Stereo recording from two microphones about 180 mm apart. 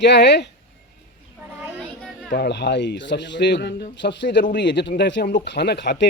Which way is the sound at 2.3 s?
65° left (ahead or behind).